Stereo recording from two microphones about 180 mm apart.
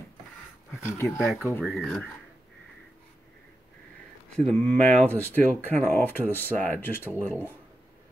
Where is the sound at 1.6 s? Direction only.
Centre (ahead or behind).